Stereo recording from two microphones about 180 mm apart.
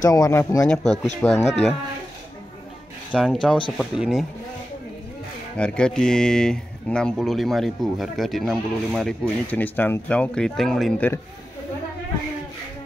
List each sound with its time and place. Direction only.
0.0 s speech: 20° left (ahead or behind)
3.1 s speech: 5° left (ahead or behind)
5.6 s speech: 5° left (ahead or behind)